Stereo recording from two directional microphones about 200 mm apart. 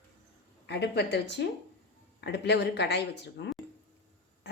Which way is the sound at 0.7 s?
55° left (ahead or behind).